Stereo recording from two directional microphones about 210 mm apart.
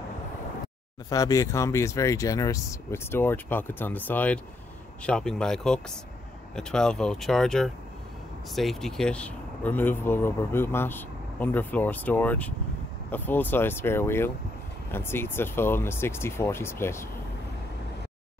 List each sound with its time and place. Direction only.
1.1 s speech: 15° left (ahead or behind)